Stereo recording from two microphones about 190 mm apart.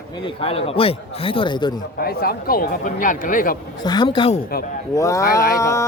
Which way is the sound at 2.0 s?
55° left (ahead or behind).